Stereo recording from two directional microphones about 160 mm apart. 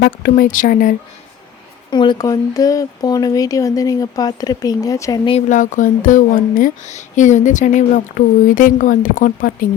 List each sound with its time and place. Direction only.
0.0 s speech: 80° left
0.4 s speech: 55° left (ahead or behind)
1.9 s speech: 30° left (ahead or behind)
5.5 s speech: 50° left (ahead or behind)